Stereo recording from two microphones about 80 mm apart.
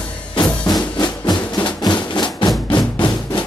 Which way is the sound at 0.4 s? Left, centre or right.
Left.